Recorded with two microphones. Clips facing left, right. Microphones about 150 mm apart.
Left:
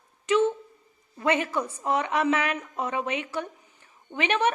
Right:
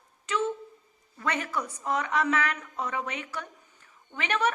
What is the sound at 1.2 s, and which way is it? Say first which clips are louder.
A woman's voice: left 6 dB; 20° left (ahead or behind).